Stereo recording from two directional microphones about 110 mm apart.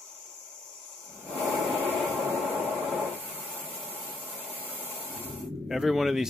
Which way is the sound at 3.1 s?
15° right (ahead or behind).